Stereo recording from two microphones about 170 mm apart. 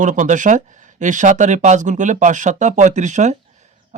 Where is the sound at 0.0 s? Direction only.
45° right (ahead or behind).